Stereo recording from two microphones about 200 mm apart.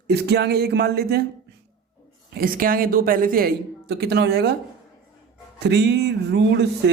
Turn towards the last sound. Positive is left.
turn(degrees=-60)  # may be behind; listen again after turning